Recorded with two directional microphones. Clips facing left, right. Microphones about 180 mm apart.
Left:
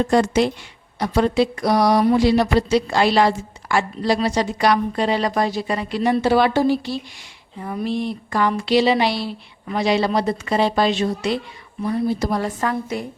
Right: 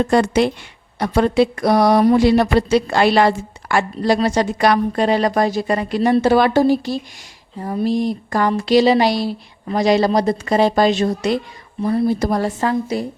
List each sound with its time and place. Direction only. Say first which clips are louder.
0.1 s speech: right 2 dB; 65° right (ahead or behind); by 12.5 s 45° right (ahead or behind)
12.5 s speech: right 4 dB; 30° right (ahead or behind)